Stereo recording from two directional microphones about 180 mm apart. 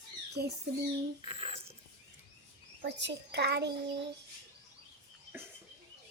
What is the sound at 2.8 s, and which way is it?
Speech, 75° right (ahead or behind).